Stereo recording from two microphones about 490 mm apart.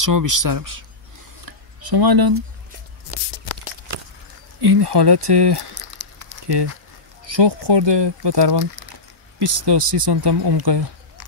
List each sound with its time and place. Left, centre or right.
0.0 s speech: right
1.4 s a sound: right
4.6 s speech: right
5.8 s a sound: right
7.3 s speech: right
9.4 s speech: right
9.8 s speech: right